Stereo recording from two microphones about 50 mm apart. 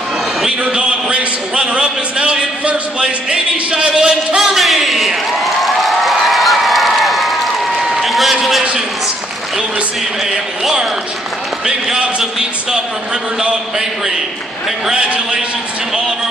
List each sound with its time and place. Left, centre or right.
0.5 s a man's voice: right
4.4 s a sound: centre
10.3 s a man's voice: centre
15.0 s a man's voice: centre